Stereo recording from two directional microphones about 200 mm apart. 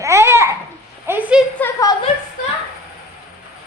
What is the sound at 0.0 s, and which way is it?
Babbling, 15° right (ahead or behind).